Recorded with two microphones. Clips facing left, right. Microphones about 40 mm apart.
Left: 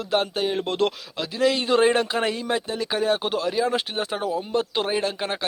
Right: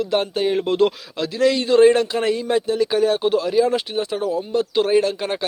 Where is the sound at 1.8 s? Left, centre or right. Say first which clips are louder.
Right 9 dB; centre.